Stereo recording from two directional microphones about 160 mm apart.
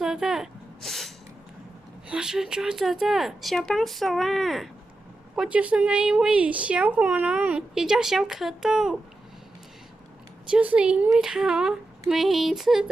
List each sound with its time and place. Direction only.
0.0 s sneeze: 5° right (ahead or behind)
2.0 s speech: 5° right (ahead or behind)
10.5 s speech: 10° right (ahead or behind)